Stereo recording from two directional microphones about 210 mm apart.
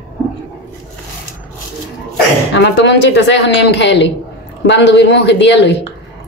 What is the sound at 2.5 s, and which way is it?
Speech, 55° left (ahead or behind).